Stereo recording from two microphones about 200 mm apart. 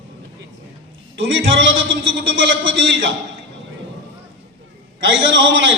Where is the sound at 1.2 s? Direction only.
65° right (ahead or behind).